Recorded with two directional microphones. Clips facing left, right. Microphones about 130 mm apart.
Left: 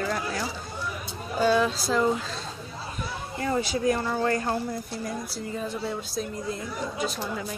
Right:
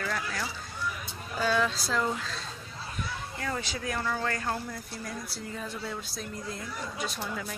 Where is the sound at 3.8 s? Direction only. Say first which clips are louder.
Left 5 dB; 30° left (ahead or behind).